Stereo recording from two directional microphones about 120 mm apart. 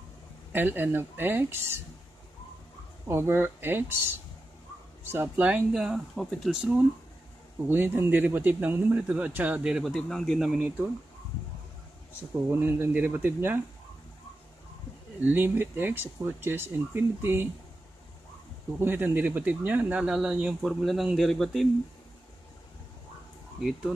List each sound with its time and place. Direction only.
0.5 s speech: 15° right (ahead or behind)
3.1 s speech: 20° right (ahead or behind)
5.8 s speech: centre (ahead or behind)
7.6 s speech: 15° right (ahead or behind)
9.9 s speech: 5° left (ahead or behind)
12.4 s speech: 15° right (ahead or behind)
15.2 s speech: 15° right (ahead or behind)
18.8 s speech: 15° right (ahead or behind); by 21.6 s centre (ahead or behind)